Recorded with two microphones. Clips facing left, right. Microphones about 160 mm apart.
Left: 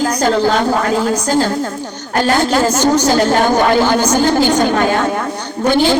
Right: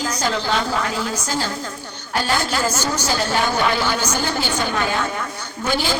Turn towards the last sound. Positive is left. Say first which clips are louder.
# left 9 dB
turn(degrees=55)  # may be behind; listen again after turning